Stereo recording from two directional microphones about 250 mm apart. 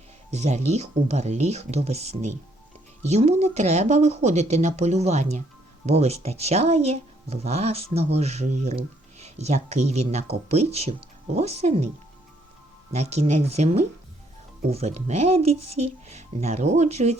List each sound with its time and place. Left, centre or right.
0.3 s speech: right
12.9 s speech: right